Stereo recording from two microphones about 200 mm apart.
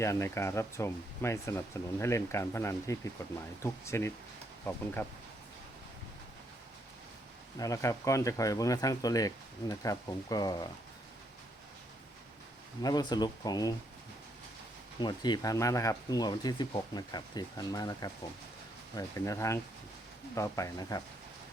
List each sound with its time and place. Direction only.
0.0 s speech: 15° left (ahead or behind)
7.6 s speech: 15° left (ahead or behind)
12.8 s speech: 20° left (ahead or behind)
14.9 s speech: 20° left (ahead or behind)